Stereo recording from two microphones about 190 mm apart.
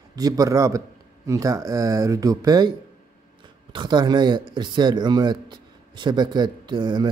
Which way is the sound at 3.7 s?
25° right (ahead or behind).